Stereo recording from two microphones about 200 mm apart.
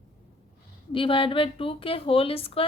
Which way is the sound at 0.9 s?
25° left (ahead or behind).